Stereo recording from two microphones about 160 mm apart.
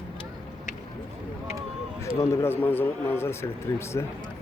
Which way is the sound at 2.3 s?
15° left (ahead or behind).